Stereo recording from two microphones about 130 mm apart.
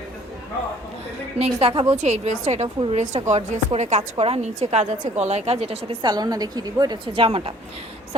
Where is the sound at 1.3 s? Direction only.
50° right (ahead or behind).